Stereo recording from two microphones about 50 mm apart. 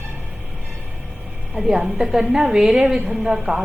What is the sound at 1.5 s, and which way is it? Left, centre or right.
A woman's voice, centre.